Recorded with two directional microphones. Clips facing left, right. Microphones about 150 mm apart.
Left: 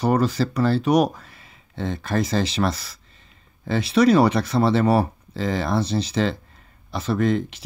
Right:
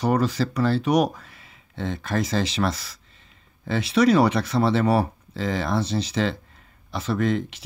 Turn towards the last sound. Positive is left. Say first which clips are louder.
# left 2 dB
turn(degrees=35)  # may be behind; listen again after turning